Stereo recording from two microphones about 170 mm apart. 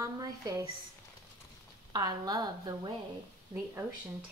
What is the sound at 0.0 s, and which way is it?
Speech, 20° right (ahead or behind).